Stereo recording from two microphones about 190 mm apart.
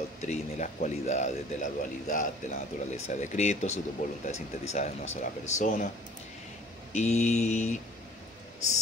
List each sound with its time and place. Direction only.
0.2 s speech: 40° left (ahead or behind)
6.9 s speech: 35° left (ahead or behind)